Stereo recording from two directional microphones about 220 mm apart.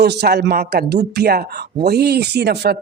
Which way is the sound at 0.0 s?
50° right (ahead or behind).